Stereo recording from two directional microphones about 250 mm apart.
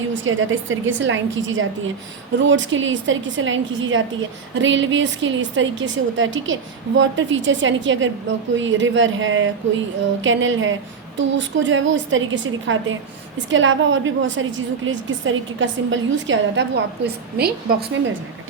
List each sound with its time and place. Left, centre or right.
0.1 s a woman's voice: right